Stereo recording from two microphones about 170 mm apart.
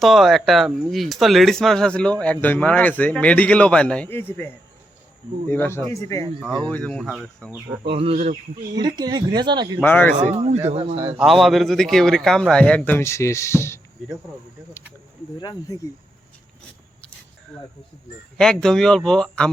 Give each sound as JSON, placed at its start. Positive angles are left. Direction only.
{"t": 0.0, "sound": "speech", "side_deg": 0}
{"t": 5.5, "sound": "speech", "side_deg": 15}
{"t": 6.7, "sound": "a man's voice", "side_deg": 5}
{"t": 7.9, "sound": "speech", "side_deg": -35}
{"t": 8.7, "sound": "speech", "side_deg": -25}
{"t": 9.8, "sound": "speech", "side_deg": 10}
{"t": 10.2, "sound": "speech", "side_deg": -40}
{"t": 11.2, "sound": "a man's voice", "side_deg": 0}
{"t": 15.4, "sound": "speech", "side_deg": 25}
{"t": 18.3, "sound": "a man's voice", "side_deg": 5}